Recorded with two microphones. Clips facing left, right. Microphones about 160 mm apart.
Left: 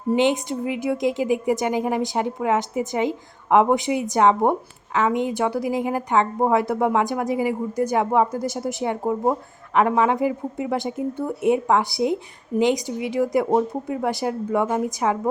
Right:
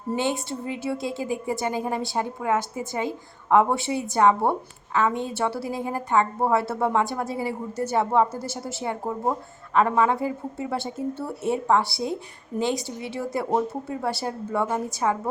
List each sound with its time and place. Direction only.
0.1 s a woman's voice: 15° left (ahead or behind)